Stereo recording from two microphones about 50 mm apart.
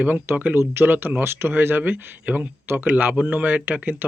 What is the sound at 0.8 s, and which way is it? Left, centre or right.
Speech, right.